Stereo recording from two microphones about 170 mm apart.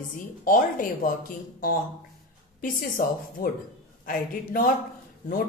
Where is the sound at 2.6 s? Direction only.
55° left (ahead or behind).